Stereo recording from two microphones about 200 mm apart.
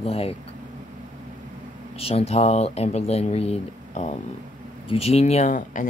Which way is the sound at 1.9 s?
30° left (ahead or behind).